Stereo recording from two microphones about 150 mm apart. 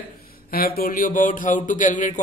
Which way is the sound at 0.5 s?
80° left.